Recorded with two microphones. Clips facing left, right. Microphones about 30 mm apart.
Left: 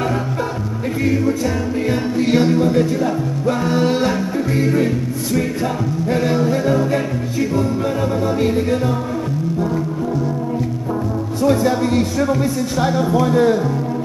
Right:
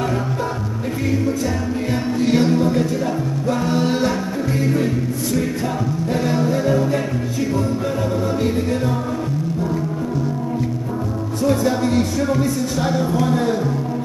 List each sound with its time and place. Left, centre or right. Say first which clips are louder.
1.0 s music: left 3 dB; centre
1.9 s speech: left 1 dB; centre
3.4 s music: left 3 dB; centre
8.4 s speech: left 3 dB; centre
11.4 s speech: left 2 dB; centre